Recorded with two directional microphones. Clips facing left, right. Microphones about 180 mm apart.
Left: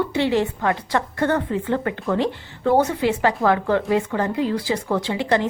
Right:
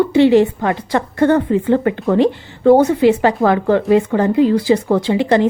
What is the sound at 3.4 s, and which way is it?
A woman's voice, 25° right (ahead or behind).